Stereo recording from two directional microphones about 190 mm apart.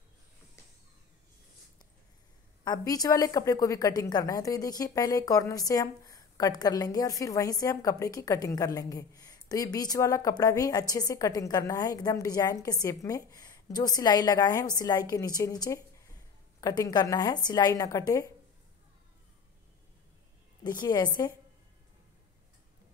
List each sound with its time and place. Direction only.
2.6 s a woman's voice: 20° left (ahead or behind)
20.8 s a woman's voice: 20° left (ahead or behind)